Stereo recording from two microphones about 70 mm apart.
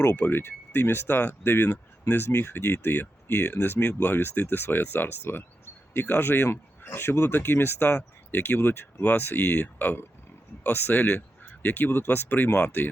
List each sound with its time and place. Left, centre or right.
0.2 s speech: left